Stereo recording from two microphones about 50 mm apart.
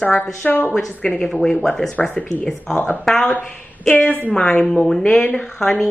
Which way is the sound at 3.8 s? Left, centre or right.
Left.